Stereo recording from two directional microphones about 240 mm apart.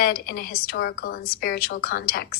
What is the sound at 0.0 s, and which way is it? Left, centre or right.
A woman's voice, left.